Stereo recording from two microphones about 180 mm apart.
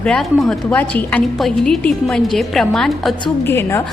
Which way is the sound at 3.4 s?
15° left (ahead or behind).